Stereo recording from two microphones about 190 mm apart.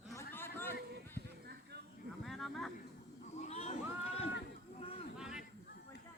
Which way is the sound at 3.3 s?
35° left (ahead or behind).